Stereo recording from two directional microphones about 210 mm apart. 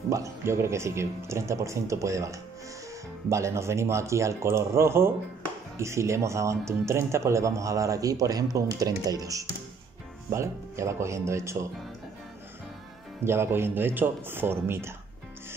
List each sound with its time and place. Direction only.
0.1 s speech: 15° right (ahead or behind)
13.2 s speech: 10° right (ahead or behind)